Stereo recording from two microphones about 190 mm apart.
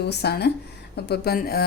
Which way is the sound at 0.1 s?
60° left (ahead or behind).